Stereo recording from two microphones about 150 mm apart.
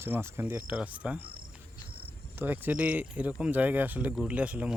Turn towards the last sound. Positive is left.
turn(degrees=-10)  # may be behind; listen again after turning